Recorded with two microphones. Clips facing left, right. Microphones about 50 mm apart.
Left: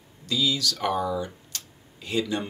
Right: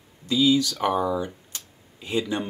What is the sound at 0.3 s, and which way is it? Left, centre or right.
Speech, right.